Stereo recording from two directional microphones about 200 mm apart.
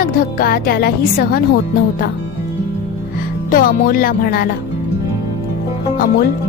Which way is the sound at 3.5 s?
45° left (ahead or behind).